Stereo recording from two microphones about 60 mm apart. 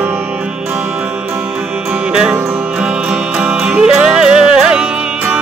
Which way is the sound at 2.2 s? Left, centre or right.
Centre.